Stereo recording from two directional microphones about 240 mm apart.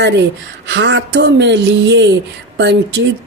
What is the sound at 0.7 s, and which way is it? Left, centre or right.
Speech, right.